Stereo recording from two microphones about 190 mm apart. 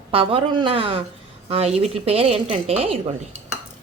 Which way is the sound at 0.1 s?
30° right (ahead or behind).